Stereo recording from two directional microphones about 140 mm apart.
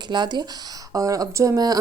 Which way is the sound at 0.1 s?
30° right (ahead or behind).